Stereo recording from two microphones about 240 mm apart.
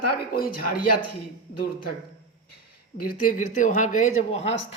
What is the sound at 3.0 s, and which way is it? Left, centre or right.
Speech, left.